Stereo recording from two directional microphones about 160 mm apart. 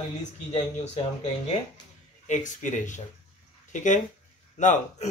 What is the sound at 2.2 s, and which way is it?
Speech, 50° left (ahead or behind).